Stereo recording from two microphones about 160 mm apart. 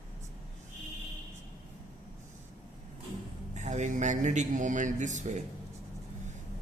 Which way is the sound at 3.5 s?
45° right (ahead or behind).